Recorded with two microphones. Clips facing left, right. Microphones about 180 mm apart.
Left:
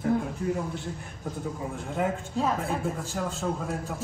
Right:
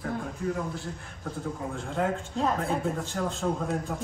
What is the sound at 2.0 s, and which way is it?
A man's voice, centre (ahead or behind).